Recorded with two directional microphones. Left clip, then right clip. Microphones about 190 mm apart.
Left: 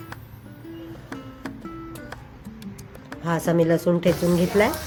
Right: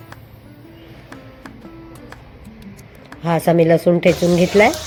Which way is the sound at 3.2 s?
15° right (ahead or behind).